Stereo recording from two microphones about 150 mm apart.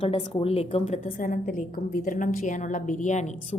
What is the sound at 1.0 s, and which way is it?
A woman's voice, 60° left (ahead or behind).